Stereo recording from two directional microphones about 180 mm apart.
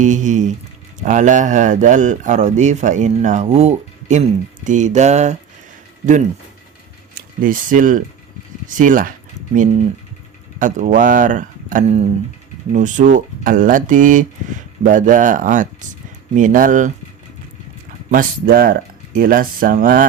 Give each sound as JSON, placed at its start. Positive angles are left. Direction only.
{"t": 0.0, "sound": "speech", "side_deg": -45}
{"t": 7.2, "sound": "speech", "side_deg": -50}
{"t": 10.6, "sound": "speech", "side_deg": -45}
{"t": 18.1, "sound": "speech", "side_deg": -55}